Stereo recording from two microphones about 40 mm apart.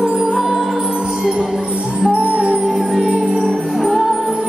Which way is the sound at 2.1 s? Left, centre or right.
Right.